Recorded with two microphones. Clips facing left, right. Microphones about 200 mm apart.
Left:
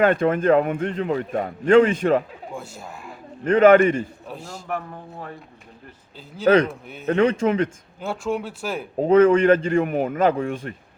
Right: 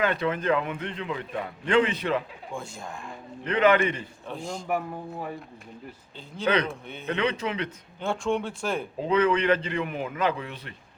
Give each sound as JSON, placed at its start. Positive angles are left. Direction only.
{"t": 0.0, "sound": "a man's voice", "side_deg": 50}
{"t": 2.5, "sound": "speech", "side_deg": 5}
{"t": 3.4, "sound": "a man's voice", "side_deg": 45}
{"t": 4.3, "sound": "a man's voice", "side_deg": 5}
{"t": 4.7, "sound": "a man's voice", "side_deg": -10}
{"t": 6.4, "sound": "a man's voice", "side_deg": 45}
{"t": 6.7, "sound": "speech", "side_deg": 5}
{"t": 7.0, "sound": "a man's voice", "side_deg": 45}
{"t": 8.0, "sound": "speech", "side_deg": 5}
{"t": 9.0, "sound": "a man's voice", "side_deg": 45}